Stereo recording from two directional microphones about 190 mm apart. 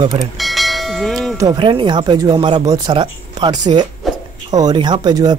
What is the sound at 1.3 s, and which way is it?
Speech, 20° right (ahead or behind).